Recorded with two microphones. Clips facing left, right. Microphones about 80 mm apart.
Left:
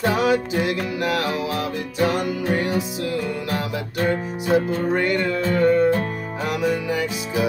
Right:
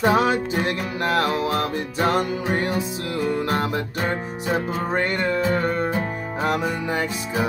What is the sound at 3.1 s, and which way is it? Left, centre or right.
Music, right.